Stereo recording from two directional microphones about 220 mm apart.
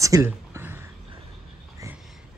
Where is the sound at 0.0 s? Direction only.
15° right (ahead or behind).